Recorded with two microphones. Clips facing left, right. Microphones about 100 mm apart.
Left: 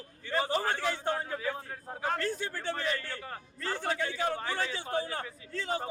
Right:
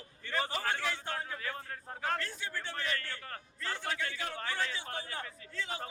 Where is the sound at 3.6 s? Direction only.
35° left (ahead or behind).